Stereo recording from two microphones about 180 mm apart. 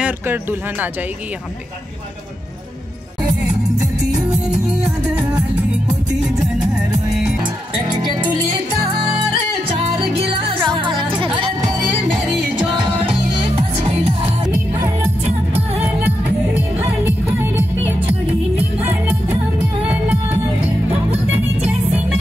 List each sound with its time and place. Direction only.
0.0 s speech: 10° right (ahead or behind)
4.1 s music: 5° right (ahead or behind)
9.7 s music: 30° right (ahead or behind)
16.5 s music: 10° right (ahead or behind)
19.8 s music: 10° right (ahead or behind)